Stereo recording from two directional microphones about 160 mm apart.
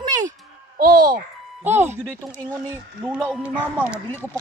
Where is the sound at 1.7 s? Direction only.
45° right (ahead or behind).